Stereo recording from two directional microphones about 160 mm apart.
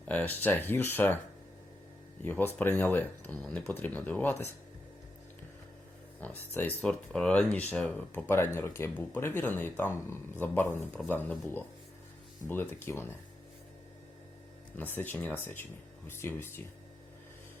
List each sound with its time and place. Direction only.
0.1 s speech: 10° left (ahead or behind)
2.2 s speech: 10° left (ahead or behind)
6.1 s speech: 10° left (ahead or behind)
14.8 s speech: 10° left (ahead or behind)